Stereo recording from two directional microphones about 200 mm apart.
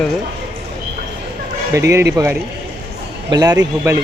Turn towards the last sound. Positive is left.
turn(degrees=-15)  # may be behind; listen again after turning